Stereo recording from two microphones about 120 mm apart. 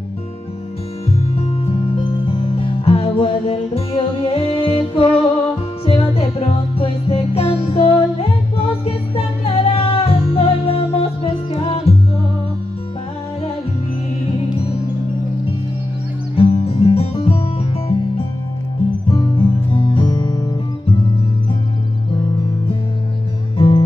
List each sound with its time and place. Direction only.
1.4 s music: 55° left (ahead or behind)
16.3 s music: 55° left (ahead or behind)
19.3 s music: 45° left (ahead or behind)